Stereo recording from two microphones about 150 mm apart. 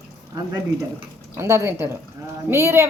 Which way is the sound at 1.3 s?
20° right (ahead or behind).